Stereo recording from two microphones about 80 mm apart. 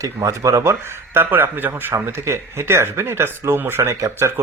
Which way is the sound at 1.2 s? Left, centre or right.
Right.